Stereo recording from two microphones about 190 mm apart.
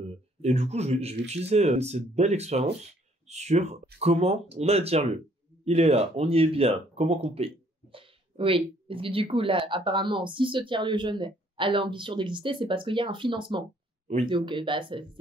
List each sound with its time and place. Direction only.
0.4 s speech: 35° right (ahead or behind)